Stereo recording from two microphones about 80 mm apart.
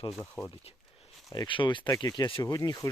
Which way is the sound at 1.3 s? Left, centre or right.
Left.